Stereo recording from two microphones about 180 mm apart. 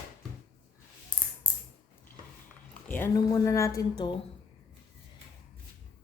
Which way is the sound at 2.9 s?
15° left (ahead or behind).